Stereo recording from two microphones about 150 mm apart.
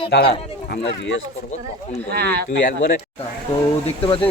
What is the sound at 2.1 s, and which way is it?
Speech, 90° right.